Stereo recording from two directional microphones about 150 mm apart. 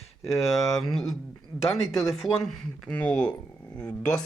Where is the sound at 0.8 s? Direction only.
Centre (ahead or behind).